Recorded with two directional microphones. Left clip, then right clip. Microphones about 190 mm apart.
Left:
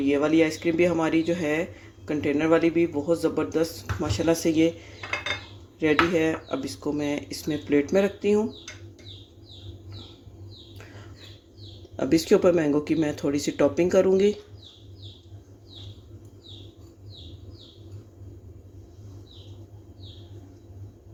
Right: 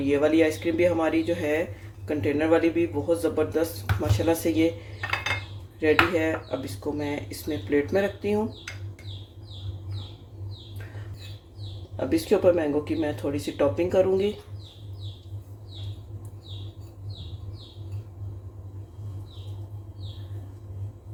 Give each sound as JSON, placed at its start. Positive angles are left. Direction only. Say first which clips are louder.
{"t": 0.0, "sound": "speech", "louder": "even", "side_deg": 20}
{"t": 5.8, "sound": "speech", "louder": "even", "side_deg": 25}
{"t": 11.9, "sound": "speech", "louder": "left 3 dB", "side_deg": 30}